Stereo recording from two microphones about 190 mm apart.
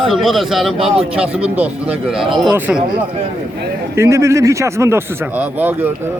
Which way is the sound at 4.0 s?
15° right (ahead or behind).